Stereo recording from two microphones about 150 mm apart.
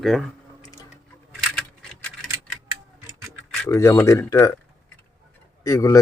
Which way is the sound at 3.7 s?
20° left (ahead or behind).